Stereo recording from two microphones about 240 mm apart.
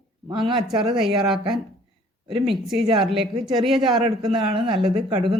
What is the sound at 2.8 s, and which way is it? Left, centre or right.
Speech, right.